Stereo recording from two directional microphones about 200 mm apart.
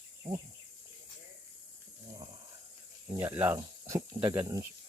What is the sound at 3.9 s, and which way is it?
Speech, 25° right (ahead or behind).